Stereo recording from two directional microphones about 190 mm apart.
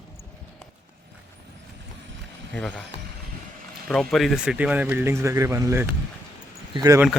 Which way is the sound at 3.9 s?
Centre (ahead or behind).